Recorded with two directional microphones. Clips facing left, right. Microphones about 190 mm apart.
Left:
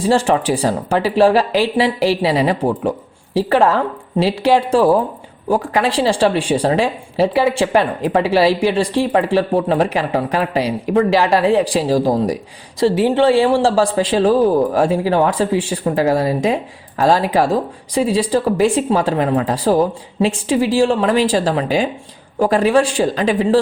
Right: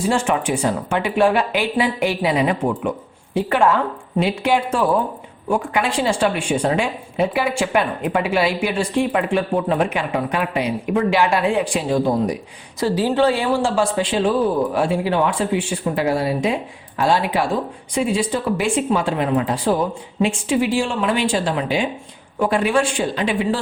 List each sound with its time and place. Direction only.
0.0 s speech: 35° left (ahead or behind)
12.8 s speech: 25° left (ahead or behind); by 23.6 s 40° left (ahead or behind)